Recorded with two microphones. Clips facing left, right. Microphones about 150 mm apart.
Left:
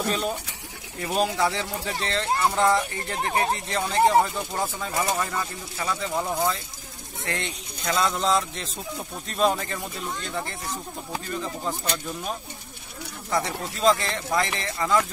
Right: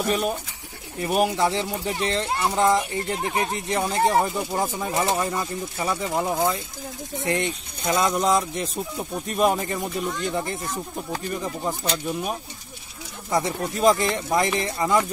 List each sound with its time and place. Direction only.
0.0 s speech: 15° right (ahead or behind)